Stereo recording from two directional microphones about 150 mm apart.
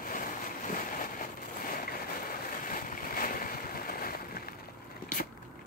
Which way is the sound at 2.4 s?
65° left (ahead or behind).